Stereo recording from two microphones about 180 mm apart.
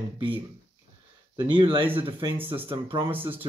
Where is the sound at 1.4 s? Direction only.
30° right (ahead or behind).